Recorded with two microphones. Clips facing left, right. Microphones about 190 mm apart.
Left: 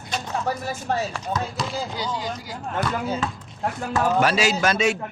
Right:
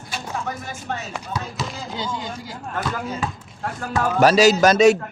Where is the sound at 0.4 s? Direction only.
35° left (ahead or behind).